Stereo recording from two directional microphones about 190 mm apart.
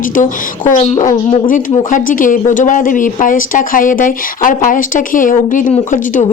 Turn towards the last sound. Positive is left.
turn(degrees=45)  # may be behind; listen again after turning